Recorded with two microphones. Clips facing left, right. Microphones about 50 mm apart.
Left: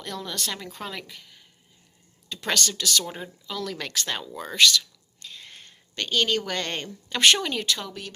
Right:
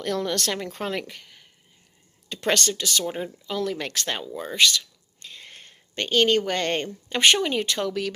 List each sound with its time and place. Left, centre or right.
0.0 s speech: right
0.5 s speech: right
2.3 s speech: right
4.3 s speech: centre
4.5 s speech: right
5.2 s speech: right